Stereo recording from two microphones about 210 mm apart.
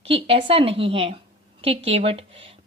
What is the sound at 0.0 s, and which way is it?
A woman's voice, 25° right (ahead or behind).